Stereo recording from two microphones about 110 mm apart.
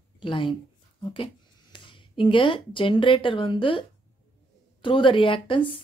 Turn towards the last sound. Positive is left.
turn(degrees=50)  # may be behind; listen again after turning